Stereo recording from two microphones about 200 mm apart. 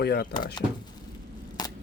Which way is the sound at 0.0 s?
50° left (ahead or behind).